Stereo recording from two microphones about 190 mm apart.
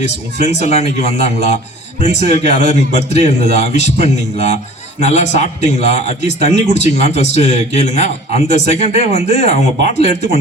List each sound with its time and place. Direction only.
0.0 s a man's voice: 35° left (ahead or behind)